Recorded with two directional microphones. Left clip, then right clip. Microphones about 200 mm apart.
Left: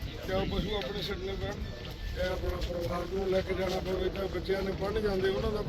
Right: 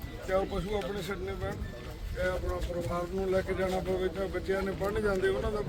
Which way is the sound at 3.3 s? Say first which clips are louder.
Right 1 dB; 5° left (ahead or behind).